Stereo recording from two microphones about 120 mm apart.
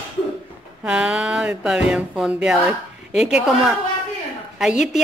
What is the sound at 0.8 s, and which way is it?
Speech, 5° right (ahead or behind).